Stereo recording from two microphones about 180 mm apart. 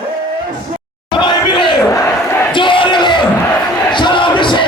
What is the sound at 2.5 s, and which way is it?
Crowd, 25° left (ahead or behind).